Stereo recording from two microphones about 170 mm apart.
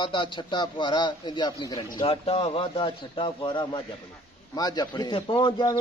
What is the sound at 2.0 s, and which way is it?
A man's voice, 35° left (ahead or behind).